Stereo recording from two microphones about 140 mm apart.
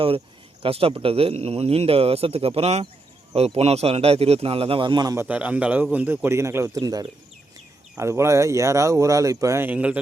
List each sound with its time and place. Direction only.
0.6 s speech: 40° right (ahead or behind)
5.1 s a man's voice: 10° right (ahead or behind)